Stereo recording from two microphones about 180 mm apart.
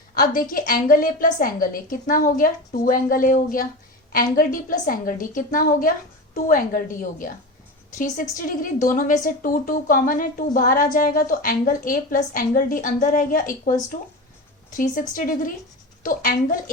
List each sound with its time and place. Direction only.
0.1 s a woman's voice: 50° left (ahead or behind)
14.8 s a woman's voice: 50° left (ahead or behind)